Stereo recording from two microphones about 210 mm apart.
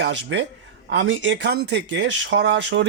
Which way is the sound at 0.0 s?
60° right (ahead or behind).